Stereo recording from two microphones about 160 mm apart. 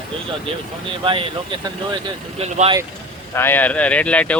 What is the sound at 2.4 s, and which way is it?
Speech, 40° right (ahead or behind).